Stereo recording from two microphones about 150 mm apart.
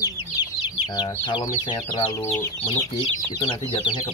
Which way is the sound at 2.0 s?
45° left (ahead or behind).